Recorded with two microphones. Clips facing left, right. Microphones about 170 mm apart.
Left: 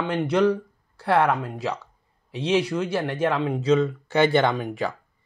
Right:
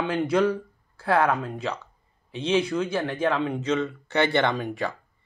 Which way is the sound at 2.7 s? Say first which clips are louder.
Left 1 dB; 5° left (ahead or behind).